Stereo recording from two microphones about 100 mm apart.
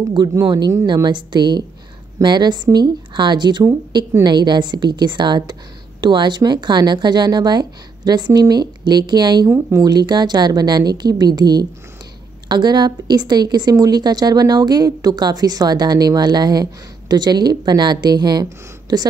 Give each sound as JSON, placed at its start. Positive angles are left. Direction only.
{"t": 0.5, "sound": "a woman's voice", "side_deg": -45}
{"t": 9.5, "sound": "speech", "side_deg": -30}
{"t": 9.8, "sound": "a woman's voice", "side_deg": -45}